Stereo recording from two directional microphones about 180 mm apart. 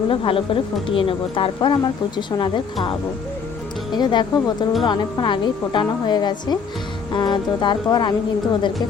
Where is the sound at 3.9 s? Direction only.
25° left (ahead or behind).